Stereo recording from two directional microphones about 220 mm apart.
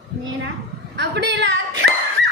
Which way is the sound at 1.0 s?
50° right (ahead or behind).